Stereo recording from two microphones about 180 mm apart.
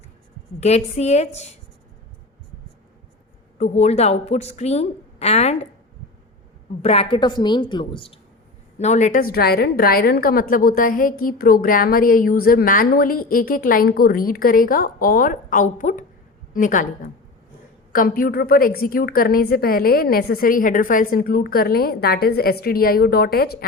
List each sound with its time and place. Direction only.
0.6 s speech: 35° left (ahead or behind)
3.6 s speech: 35° left (ahead or behind)
6.8 s a woman's voice: 35° left (ahead or behind)
8.8 s a woman's voice: 40° left (ahead or behind); by 23.6 s 60° left (ahead or behind)